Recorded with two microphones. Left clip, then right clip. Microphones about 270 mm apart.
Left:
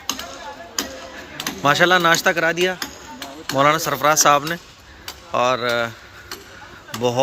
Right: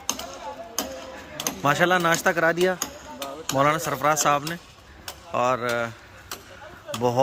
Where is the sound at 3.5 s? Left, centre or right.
Centre.